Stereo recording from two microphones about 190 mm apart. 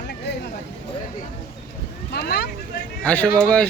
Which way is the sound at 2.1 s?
60° left (ahead or behind).